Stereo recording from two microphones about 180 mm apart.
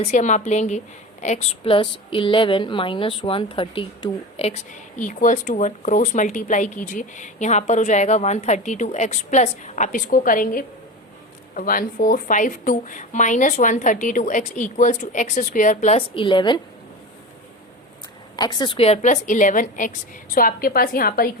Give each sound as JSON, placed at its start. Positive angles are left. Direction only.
{"t": 0.0, "sound": "a woman's voice", "side_deg": 40}
{"t": 18.3, "sound": "a woman's voice", "side_deg": 20}